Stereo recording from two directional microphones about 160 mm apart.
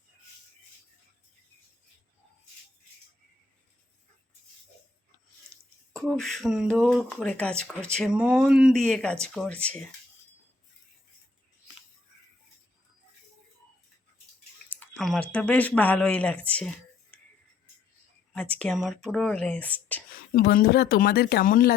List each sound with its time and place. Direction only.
5.9 s speech: 5° left (ahead or behind)
14.7 s speech: 5° left (ahead or behind)
18.3 s speech: 10° left (ahead or behind)
20.1 s speech: 65° left (ahead or behind)